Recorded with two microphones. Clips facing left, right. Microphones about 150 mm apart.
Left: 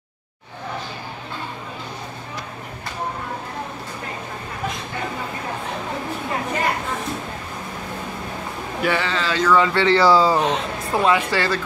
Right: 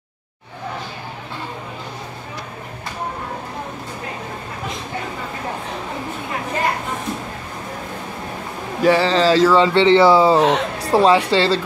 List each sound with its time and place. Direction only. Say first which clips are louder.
8.8 s speech: right 8 dB; 35° right (ahead or behind)
10.4 s speech: right 5 dB; 75° right (ahead or behind)
10.9 s speech: right 5 dB; 35° right (ahead or behind)